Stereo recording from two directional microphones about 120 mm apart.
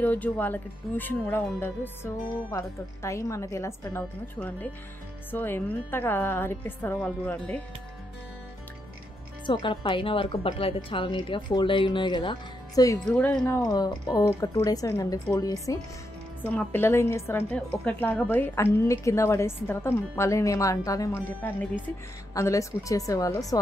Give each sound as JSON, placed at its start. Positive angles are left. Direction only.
{"t": 0.0, "sound": "a woman's voice", "side_deg": 15}
{"t": 9.5, "sound": "a woman's voice", "side_deg": 45}
{"t": 12.7, "sound": "a woman's voice", "side_deg": 30}
{"t": 13.1, "sound": "a woman's voice", "side_deg": 10}
{"t": 13.7, "sound": "a woman's voice", "side_deg": 30}
{"t": 16.4, "sound": "a woman's voice", "side_deg": 15}
{"t": 17.6, "sound": "a woman's voice", "side_deg": 10}
{"t": 22.3, "sound": "a woman's voice", "side_deg": 25}